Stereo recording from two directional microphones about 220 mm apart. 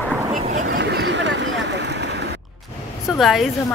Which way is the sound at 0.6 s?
50° right (ahead or behind).